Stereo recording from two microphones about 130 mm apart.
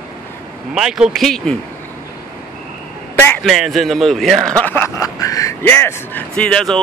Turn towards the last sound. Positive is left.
turn(degrees=5)  # may be behind; listen again after turning